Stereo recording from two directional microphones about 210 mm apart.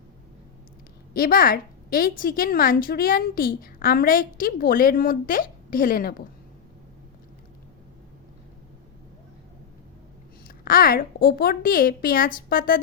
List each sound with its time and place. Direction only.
1.1 s a woman's voice: 45° left (ahead or behind)
10.6 s a woman's voice: 45° left (ahead or behind)